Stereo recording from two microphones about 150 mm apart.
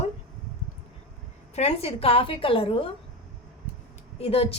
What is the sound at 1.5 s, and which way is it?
A woman's voice, 45° left (ahead or behind).